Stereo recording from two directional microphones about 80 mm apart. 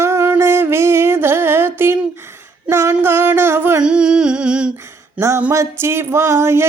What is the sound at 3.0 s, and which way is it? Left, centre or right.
Music, right.